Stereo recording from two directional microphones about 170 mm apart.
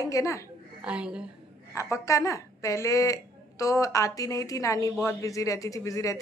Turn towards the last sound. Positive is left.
turn(degrees=20)  # may be behind; listen again after turning